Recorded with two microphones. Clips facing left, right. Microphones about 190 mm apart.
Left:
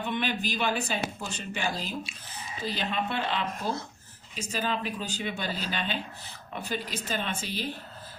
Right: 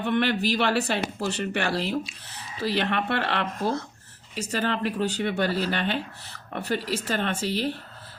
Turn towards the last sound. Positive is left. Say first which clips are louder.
# right 7 dB
turn(degrees=-65)  # may be behind; listen again after turning